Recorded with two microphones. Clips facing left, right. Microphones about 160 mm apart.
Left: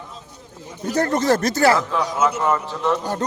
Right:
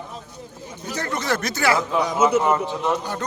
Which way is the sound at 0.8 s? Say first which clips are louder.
Left 7 dB; 50° left (ahead or behind).